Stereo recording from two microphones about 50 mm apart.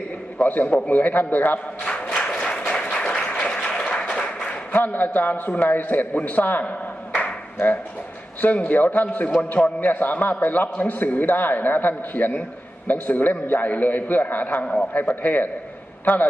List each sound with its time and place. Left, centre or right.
0.4 s a man's voice: left
1.8 s a sound: centre
2.1 s applause: centre
4.4 s a man's voice: left
8.4 s a man's voice: left
14.6 s a man's voice: centre
15.0 s a man's voice: left